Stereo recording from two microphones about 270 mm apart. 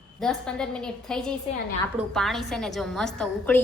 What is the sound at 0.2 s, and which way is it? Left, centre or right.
A woman's voice, centre.